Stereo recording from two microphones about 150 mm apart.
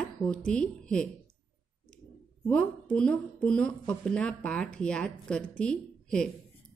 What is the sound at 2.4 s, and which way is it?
A woman's voice, 10° left (ahead or behind).